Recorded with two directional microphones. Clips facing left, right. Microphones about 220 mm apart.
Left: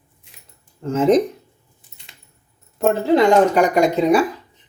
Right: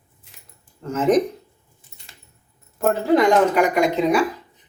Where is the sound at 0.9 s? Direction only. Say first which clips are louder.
Left 3 dB; 25° left (ahead or behind).